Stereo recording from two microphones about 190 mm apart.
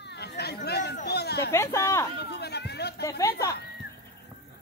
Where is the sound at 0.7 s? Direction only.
60° left (ahead or behind).